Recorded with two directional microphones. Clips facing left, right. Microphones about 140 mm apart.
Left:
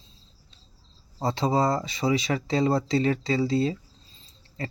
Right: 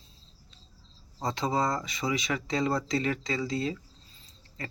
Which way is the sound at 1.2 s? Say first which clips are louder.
Left 5 dB; 30° left (ahead or behind).